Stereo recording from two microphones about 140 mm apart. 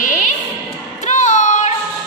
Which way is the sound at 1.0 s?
60° left (ahead or behind).